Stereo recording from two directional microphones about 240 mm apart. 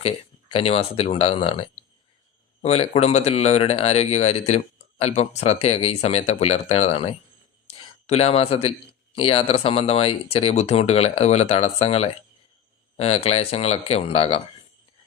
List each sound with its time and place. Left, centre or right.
0.0 s speech: left
7.7 s a sound: left
9.1 s speech: left